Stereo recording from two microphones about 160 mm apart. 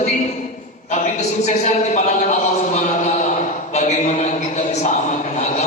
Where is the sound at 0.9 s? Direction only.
50° left (ahead or behind).